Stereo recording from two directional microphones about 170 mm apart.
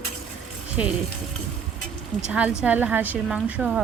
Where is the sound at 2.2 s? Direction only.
5° right (ahead or behind).